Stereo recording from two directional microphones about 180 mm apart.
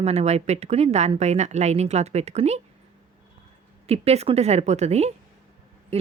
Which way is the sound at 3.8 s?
35° right (ahead or behind).